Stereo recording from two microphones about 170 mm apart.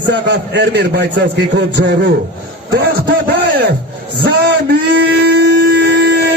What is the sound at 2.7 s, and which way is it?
A man's voice, 65° right (ahead or behind).